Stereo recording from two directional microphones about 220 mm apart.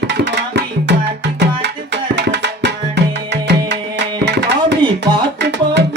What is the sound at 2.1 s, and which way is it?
Tabla, 50° right (ahead or behind).